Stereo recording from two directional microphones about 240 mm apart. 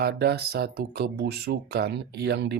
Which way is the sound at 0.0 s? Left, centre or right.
Right.